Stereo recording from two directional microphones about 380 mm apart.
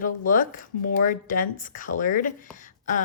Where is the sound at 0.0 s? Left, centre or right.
Left.